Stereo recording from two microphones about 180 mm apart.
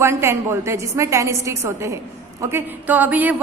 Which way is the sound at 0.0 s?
15° right (ahead or behind).